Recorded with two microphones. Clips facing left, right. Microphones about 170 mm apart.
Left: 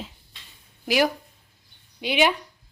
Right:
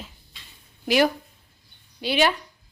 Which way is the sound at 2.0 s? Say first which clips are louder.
Even; 15° left (ahead or behind).